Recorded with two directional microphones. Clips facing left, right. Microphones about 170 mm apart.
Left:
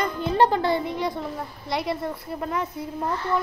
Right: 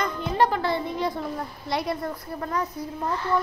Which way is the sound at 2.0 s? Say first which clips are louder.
Left 1 dB; 20° left (ahead or behind).